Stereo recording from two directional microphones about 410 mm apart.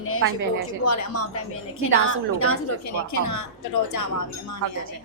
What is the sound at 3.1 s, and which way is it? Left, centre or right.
Speech, left.